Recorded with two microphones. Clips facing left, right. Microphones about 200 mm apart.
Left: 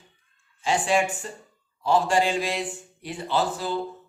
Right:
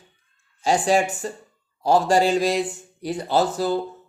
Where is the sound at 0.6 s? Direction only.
40° right (ahead or behind).